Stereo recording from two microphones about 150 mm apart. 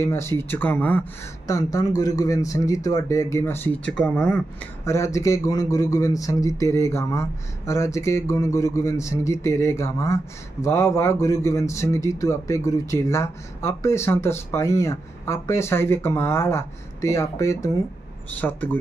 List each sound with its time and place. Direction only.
0.0 s speech: 15° left (ahead or behind)
1.5 s speech: 25° left (ahead or behind); by 4.4 s 5° left (ahead or behind)
4.8 s speech: 20° left (ahead or behind)